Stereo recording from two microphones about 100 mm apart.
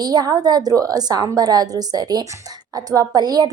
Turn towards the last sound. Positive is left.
turn(degrees=-40)  # may be behind; listen again after turning